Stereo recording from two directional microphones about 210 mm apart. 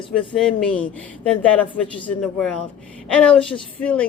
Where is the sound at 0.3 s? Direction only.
5° left (ahead or behind).